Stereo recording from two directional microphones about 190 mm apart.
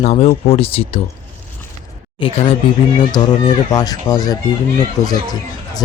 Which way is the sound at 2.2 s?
30° left (ahead or behind).